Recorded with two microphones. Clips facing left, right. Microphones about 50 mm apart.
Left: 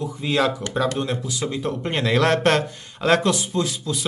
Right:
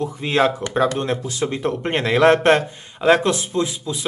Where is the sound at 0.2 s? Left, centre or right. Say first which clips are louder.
Right 3 dB; right.